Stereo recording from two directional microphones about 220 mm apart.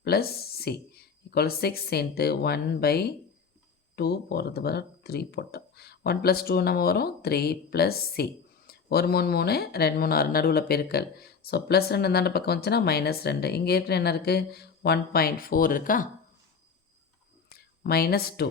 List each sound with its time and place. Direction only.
0.0 s speech: 45° left (ahead or behind)
17.6 s speech: 45° left (ahead or behind)